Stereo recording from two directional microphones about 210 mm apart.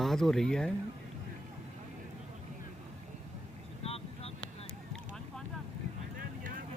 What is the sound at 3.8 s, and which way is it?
Vehicle, 30° left (ahead or behind).